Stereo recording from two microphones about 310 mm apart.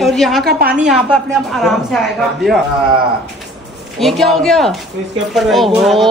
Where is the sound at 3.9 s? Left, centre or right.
Centre.